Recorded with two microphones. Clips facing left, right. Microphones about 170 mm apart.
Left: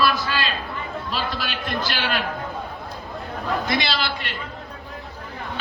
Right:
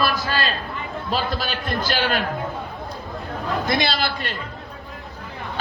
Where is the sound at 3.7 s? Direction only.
45° right (ahead or behind).